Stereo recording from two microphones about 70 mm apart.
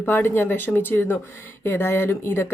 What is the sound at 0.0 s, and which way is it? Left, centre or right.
Speech, left.